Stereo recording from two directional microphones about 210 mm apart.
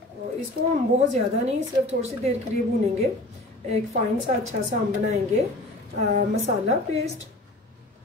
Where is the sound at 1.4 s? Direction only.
30° right (ahead or behind).